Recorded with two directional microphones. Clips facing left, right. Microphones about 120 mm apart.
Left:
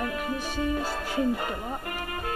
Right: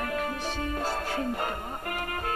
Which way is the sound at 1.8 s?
45° right (ahead or behind).